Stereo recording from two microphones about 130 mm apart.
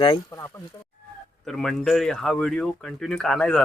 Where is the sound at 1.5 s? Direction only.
5° left (ahead or behind).